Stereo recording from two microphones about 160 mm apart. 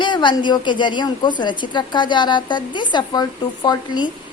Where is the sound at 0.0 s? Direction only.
30° left (ahead or behind).